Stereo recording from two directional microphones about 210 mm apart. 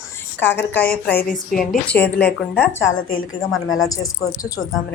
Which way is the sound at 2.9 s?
70° left (ahead or behind).